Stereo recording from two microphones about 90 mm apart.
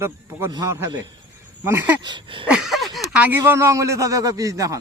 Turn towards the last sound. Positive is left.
turn(degrees=-40)  # may be behind; listen again after turning